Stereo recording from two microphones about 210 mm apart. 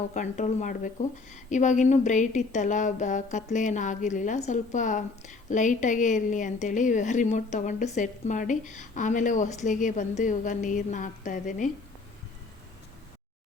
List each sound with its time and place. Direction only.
0.1 s speech: 35° left (ahead or behind)